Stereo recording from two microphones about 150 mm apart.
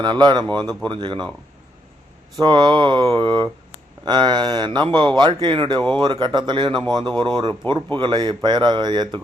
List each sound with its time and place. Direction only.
0.0 s speech: 30° right (ahead or behind)
2.4 s speech: 30° right (ahead or behind)